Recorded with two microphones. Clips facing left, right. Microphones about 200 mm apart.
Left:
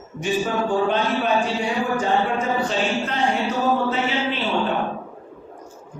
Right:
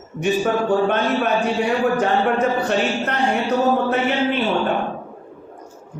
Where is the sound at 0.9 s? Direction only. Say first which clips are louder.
Right 1 dB; 60° right (ahead or behind).